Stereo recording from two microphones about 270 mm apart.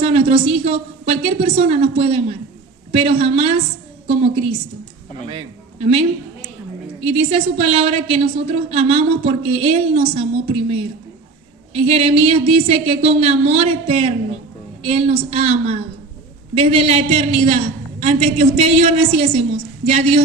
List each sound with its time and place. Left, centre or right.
0.0 s a woman's voice: right
5.8 s a woman's voice: right